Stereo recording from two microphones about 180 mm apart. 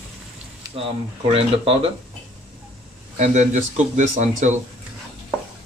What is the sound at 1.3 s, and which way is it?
Speech, 30° right (ahead or behind).